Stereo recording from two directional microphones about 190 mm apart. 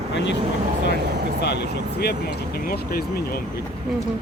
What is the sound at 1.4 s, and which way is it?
Speech, 60° left (ahead or behind).